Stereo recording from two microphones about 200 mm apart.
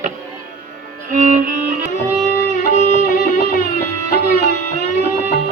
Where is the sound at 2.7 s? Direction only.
35° left (ahead or behind).